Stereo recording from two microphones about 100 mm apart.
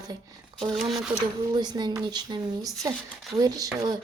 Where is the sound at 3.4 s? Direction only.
40° right (ahead or behind).